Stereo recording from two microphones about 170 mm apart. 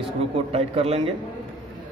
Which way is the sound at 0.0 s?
35° right (ahead or behind).